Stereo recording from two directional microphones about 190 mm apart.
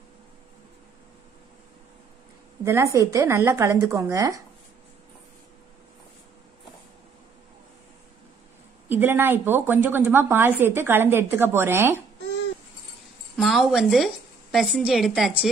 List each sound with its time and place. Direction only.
2.6 s a woman's voice: 15° right (ahead or behind)
8.8 s a woman's voice: 10° right (ahead or behind)
13.4 s a woman's voice: centre (ahead or behind)